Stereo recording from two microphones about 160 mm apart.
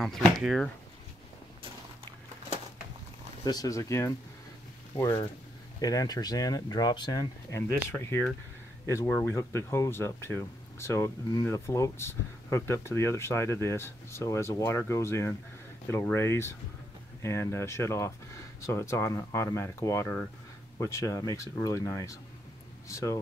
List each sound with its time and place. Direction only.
0.0 s speech: centre (ahead or behind)
3.4 s speech: 20° left (ahead or behind)